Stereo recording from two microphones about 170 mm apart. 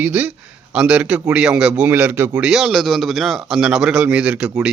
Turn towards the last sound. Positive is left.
turn(degrees=-5)  # may be behind; listen again after turning